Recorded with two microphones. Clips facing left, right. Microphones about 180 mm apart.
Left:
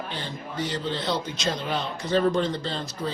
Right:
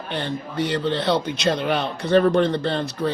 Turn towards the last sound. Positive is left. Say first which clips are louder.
# right 7 dB
turn(degrees=-60)  # may be behind; listen again after turning